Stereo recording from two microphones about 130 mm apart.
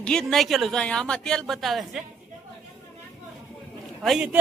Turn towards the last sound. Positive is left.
turn(degrees=0)  # may be behind; listen again after turning